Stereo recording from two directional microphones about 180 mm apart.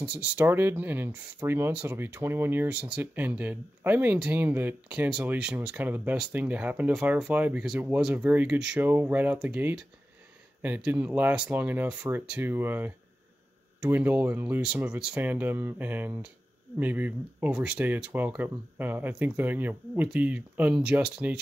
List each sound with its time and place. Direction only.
0.0 s speech: 5° right (ahead or behind)